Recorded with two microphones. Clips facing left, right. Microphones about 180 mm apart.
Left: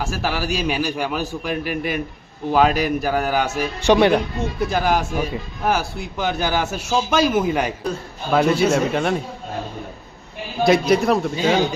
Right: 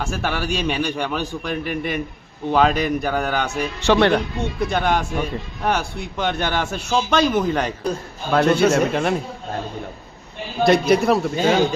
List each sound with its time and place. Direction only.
0.0 s speech: centre (ahead or behind)
4.1 s speech: centre (ahead or behind)
10.6 s speech: centre (ahead or behind)